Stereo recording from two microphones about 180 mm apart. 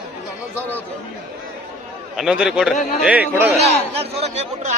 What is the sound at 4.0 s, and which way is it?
Speech, 35° right (ahead or behind).